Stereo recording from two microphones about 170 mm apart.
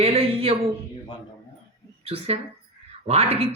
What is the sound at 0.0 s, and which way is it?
Speech, 35° right (ahead or behind).